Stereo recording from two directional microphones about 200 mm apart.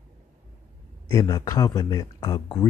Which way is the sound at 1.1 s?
15° left (ahead or behind).